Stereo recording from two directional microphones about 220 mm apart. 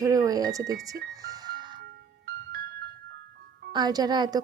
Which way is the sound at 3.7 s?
20° right (ahead or behind).